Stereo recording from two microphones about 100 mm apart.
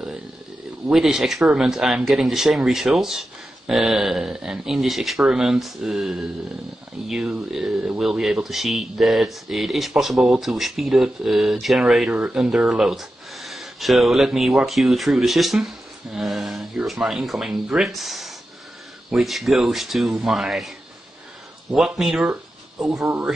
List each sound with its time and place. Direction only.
0.8 s speech: 5° right (ahead or behind)
12.1 s speech: 15° right (ahead or behind)
12.4 s speech: 5° right (ahead or behind)
21.7 s speech: 5° right (ahead or behind)